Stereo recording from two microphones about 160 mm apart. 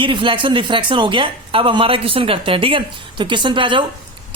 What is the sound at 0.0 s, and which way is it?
A woman's voice, 30° right (ahead or behind).